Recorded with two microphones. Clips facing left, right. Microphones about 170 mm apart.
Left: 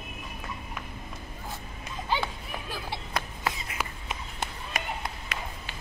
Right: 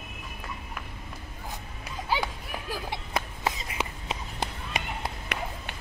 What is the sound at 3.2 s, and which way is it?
Run, 25° right (ahead or behind).